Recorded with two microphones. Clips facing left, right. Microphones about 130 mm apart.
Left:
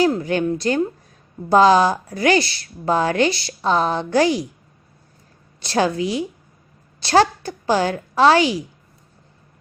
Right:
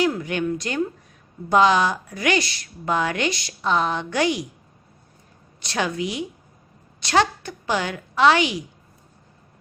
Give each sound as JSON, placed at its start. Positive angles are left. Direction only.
{"t": 0.0, "sound": "a woman's voice", "side_deg": 35}
{"t": 5.5, "sound": "a woman's voice", "side_deg": 35}